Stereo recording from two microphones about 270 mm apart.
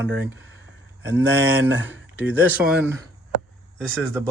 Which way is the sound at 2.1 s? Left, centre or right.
Centre.